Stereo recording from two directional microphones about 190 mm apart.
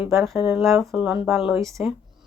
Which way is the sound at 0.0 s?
Centre (ahead or behind).